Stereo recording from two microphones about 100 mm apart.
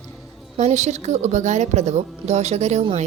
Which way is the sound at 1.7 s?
90° right.